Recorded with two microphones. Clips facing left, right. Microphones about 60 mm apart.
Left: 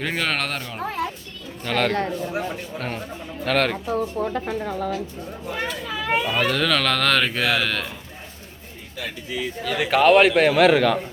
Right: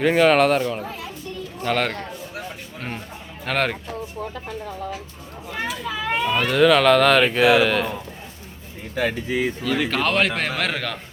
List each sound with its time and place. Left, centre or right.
0.0 s speech: centre
3.4 s speech: centre
5.5 s speech: centre
9.0 s speech: right
9.6 s a man's voice: centre